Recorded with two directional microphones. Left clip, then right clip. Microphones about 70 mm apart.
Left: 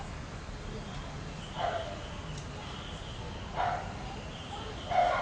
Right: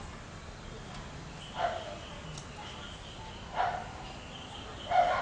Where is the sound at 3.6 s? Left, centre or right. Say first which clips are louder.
Right 1 dB; centre.